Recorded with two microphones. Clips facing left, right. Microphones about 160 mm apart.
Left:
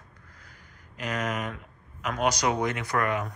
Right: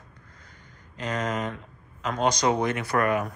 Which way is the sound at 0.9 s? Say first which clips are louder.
Right 2 dB; 30° right (ahead or behind).